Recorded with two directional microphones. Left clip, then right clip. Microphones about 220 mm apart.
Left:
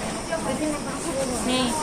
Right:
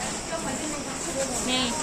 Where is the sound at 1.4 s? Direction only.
10° right (ahead or behind).